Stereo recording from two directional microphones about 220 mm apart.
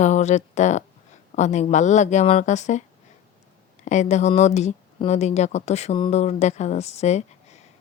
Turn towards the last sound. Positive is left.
turn(degrees=30)  # may be behind; listen again after turning